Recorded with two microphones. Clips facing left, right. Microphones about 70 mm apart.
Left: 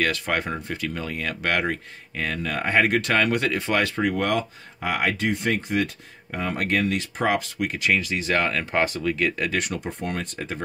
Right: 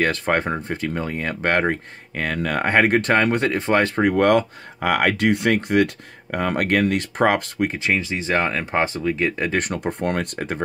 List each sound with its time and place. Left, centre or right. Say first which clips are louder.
0.0 s speech: right 4 dB; right
7.7 s speech: right 1 dB; right
9.6 s speech: right 5 dB; right